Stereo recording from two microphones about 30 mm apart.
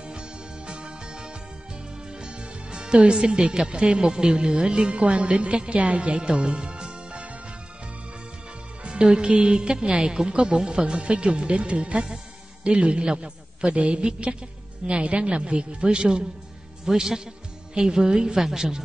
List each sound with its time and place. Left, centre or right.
0.0 s music: right
2.0 s speech: right
8.8 s a man's voice: right
13.7 s speech: right
16.8 s a man's voice: centre